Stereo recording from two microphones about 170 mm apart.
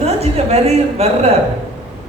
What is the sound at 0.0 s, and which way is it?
Speech, 40° right (ahead or behind).